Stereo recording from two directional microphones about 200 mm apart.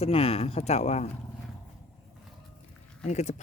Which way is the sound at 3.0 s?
35° left (ahead or behind).